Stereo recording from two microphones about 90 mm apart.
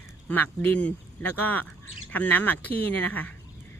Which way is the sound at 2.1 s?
20° left (ahead or behind).